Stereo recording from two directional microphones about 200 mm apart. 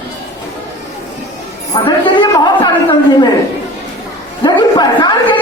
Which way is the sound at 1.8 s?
25° left (ahead or behind).